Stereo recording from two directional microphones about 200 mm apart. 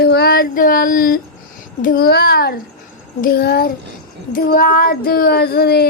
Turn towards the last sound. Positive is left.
turn(degrees=55)  # may be behind; listen again after turning